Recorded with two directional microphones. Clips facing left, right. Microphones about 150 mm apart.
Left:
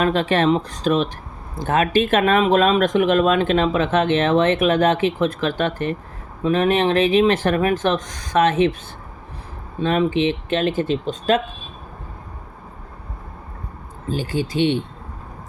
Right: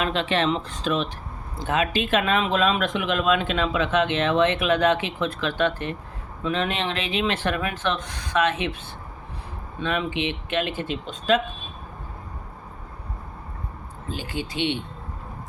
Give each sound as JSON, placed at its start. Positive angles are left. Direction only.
{"t": 0.0, "sound": "speech", "side_deg": 45}
{"t": 9.8, "sound": "speech", "side_deg": 40}
{"t": 14.1, "sound": "speech", "side_deg": 40}